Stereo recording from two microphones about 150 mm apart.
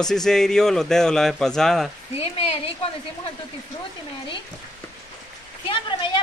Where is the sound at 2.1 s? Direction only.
40° left (ahead or behind).